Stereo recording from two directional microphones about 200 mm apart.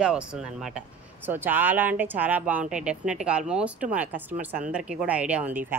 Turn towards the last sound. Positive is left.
turn(degrees=-10)  # may be behind; listen again after turning